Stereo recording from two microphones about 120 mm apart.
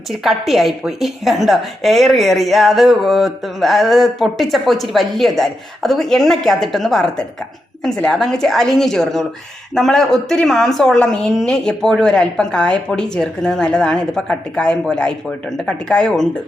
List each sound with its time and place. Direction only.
0.3 s a woman's voice: centre (ahead or behind)